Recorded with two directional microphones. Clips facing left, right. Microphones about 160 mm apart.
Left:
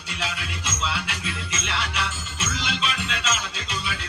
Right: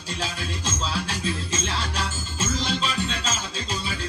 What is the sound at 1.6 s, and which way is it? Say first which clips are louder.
Music: even; 35° right (ahead or behind).